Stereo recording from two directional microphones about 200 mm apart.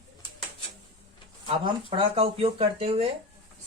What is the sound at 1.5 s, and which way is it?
Speech, 25° right (ahead or behind).